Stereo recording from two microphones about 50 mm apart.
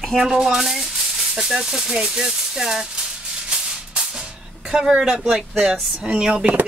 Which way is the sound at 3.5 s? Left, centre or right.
Centre.